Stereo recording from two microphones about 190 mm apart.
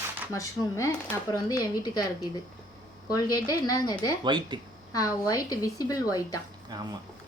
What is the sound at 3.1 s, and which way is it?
Speech, 20° left (ahead or behind).